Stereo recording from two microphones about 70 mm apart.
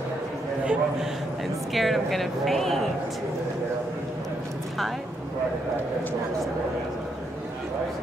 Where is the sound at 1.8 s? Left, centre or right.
Centre.